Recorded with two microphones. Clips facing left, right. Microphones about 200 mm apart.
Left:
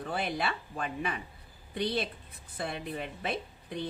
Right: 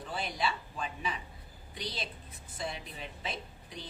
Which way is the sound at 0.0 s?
60° left (ahead or behind).